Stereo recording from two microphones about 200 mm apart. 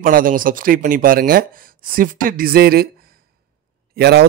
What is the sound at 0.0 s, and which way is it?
Speech, 45° right (ahead or behind).